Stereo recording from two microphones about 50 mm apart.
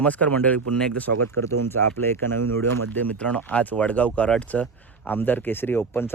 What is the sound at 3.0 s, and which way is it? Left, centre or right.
Speech, left.